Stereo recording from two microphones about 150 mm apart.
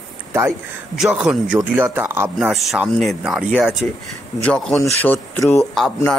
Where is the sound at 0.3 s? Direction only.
15° right (ahead or behind).